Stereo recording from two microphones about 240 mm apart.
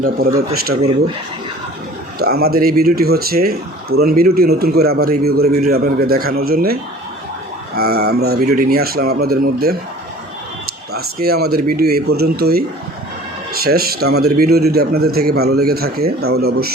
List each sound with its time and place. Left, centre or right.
0.0 s speech: right
2.1 s speech: right
7.8 s speech: right
10.9 s speech: right
13.7 s speech: right